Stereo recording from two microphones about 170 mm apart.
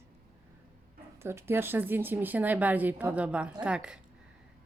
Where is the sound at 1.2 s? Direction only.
15° right (ahead or behind).